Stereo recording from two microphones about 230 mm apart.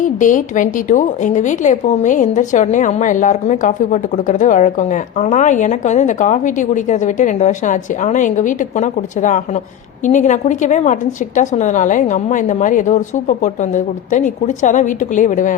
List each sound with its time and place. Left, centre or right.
0.0 s a woman's voice: left